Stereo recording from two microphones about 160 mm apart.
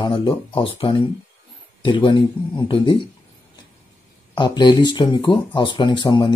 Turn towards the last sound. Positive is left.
turn(degrees=25)  # may be behind; listen again after turning